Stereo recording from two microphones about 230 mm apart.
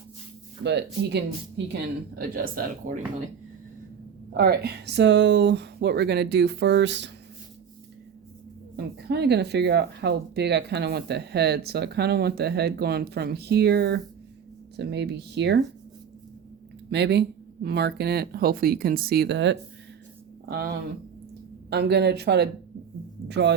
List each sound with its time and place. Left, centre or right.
0.6 s speech: right
4.4 s speech: right
8.7 s speech: right
16.9 s speech: right
21.7 s speech: right